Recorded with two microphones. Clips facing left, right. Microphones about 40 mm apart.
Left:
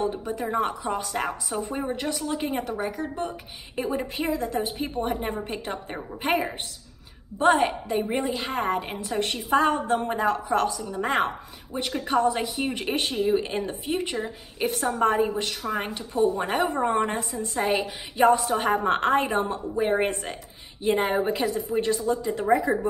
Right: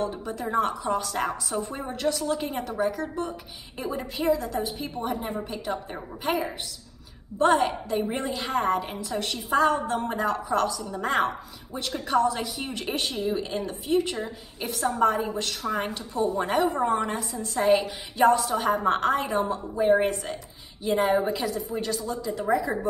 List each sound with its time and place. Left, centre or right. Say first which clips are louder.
0.0 s a woman's voice: left 2 dB; centre
7.9 s a woman's voice: left 2 dB; centre
8.5 s a woman's voice: right 5 dB; centre
9.2 s a woman's voice: left 1 dB; left
9.9 s a woman's voice: left 2 dB; left
10.8 s a woman's voice: left 2 dB; centre
11.1 s a woman's voice: even; left
15.6 s a woman's voice: even; centre
16.6 s a woman's voice: left 1 dB; left
17.6 s a woman's voice: right 4 dB; centre
18.1 s a woman's voice: left 1 dB; centre
18.5 s a woman's voice: left 1 dB; left